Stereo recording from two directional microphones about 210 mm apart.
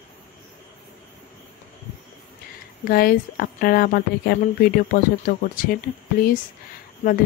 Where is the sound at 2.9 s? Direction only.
45° left (ahead or behind).